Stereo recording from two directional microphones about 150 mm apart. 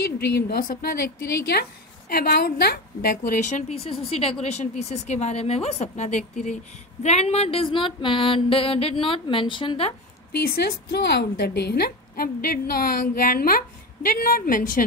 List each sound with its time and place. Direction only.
0.0 s a woman's voice: 90° left
3.3 s speech: 55° left (ahead or behind)
7.0 s a sound: 45° left (ahead or behind)
10.3 s a woman's voice: 90° left; by 14.9 s 65° left (ahead or behind)